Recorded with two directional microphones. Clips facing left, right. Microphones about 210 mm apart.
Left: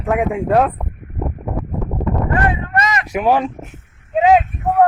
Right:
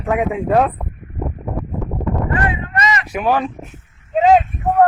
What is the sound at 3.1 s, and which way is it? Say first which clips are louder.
Speech: left 3 dB; 20° left (ahead or behind).